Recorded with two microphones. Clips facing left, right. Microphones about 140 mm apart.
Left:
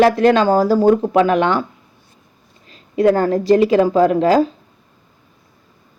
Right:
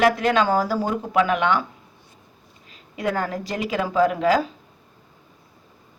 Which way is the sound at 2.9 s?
35° left (ahead or behind).